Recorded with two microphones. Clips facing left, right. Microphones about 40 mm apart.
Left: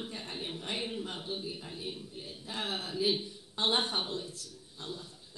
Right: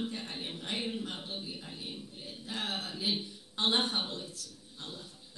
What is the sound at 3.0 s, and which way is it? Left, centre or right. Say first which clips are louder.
A man's voice: left 4 dB; centre.